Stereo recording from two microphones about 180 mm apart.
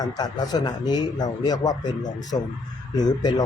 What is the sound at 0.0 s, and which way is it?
Speech, 20° left (ahead or behind).